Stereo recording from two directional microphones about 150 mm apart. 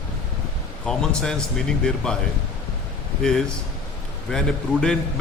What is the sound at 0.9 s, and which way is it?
Speech, 5° left (ahead or behind).